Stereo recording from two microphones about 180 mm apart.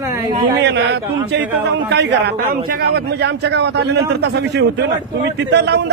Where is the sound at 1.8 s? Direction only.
70° right (ahead or behind).